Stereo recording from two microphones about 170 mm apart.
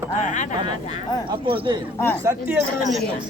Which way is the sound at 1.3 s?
30° right (ahead or behind).